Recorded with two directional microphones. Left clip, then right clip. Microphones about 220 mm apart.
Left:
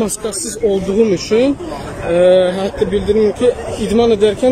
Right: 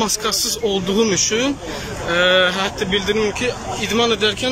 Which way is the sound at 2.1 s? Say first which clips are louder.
Left 4 dB; 20° left (ahead or behind).